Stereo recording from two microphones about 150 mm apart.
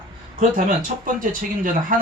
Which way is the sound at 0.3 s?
65° right (ahead or behind).